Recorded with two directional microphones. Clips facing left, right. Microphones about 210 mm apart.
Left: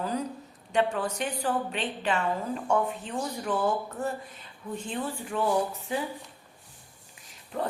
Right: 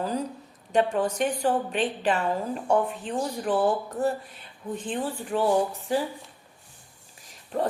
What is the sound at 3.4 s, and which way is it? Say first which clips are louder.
A woman's voice: right 4 dB; 35° right (ahead or behind).